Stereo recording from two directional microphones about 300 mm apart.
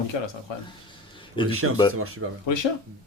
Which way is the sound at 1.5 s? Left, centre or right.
Right.